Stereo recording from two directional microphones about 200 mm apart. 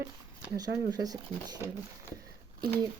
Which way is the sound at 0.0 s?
15° right (ahead or behind).